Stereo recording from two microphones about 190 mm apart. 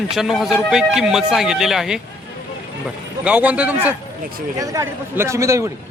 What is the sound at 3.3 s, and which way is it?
A man's voice, 5° right (ahead or behind).